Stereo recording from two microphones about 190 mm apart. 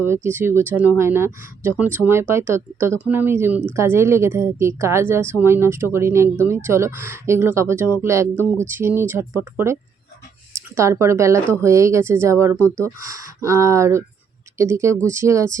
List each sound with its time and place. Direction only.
0.0 s a woman's voice: 15° right (ahead or behind)
12.5 s speech: 10° left (ahead or behind)
13.4 s a woman's voice: 15° right (ahead or behind)